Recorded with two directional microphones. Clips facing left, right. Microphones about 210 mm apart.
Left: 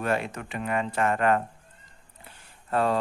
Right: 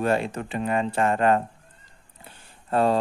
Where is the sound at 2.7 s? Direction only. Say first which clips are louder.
Right 4 dB; 30° right (ahead or behind).